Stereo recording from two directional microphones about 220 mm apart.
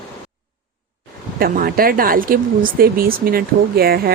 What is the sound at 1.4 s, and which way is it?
A woman's voice, 40° right (ahead or behind).